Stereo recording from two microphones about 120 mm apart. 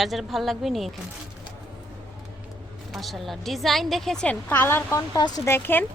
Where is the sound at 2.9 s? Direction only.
Centre (ahead or behind); by 5.3 s 30° left (ahead or behind).